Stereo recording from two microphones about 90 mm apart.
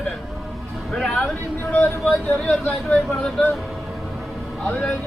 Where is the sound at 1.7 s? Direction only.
20° left (ahead or behind).